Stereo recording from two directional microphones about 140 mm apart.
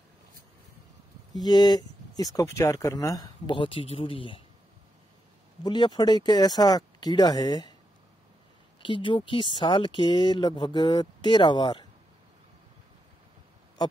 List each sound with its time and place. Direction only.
1.4 s speech: 30° left (ahead or behind)
3.5 s speech: 40° left (ahead or behind)
5.6 s speech: 30° left (ahead or behind)
8.8 s speech: 35° left (ahead or behind)